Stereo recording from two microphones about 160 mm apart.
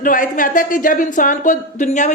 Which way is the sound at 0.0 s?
60° left (ahead or behind).